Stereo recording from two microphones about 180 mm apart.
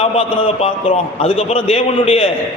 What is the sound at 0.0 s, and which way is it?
A man's voice, 35° left (ahead or behind).